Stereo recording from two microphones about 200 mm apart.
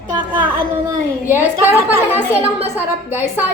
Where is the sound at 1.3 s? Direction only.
10° right (ahead or behind).